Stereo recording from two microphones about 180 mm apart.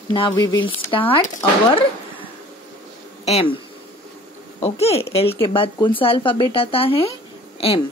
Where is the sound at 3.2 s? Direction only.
35° left (ahead or behind).